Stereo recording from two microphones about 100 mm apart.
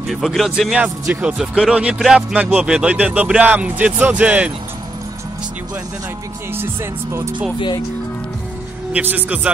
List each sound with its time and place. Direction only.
0.0 s speech: centre (ahead or behind)
2.3 s speech: 15° right (ahead or behind)
6.5 s speech: 25° right (ahead or behind)
9.1 s speech: 15° right (ahead or behind)